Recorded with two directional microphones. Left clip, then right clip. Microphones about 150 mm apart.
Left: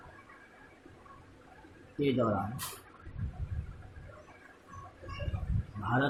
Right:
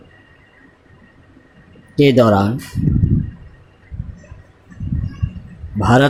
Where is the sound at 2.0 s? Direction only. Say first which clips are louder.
Right 19 dB; 50° right (ahead or behind).